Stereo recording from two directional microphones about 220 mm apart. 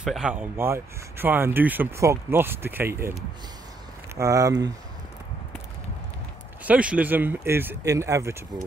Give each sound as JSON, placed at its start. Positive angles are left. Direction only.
{"t": 0.0, "sound": "speech", "side_deg": -5}
{"t": 4.2, "sound": "speech", "side_deg": -15}
{"t": 6.6, "sound": "speech", "side_deg": -5}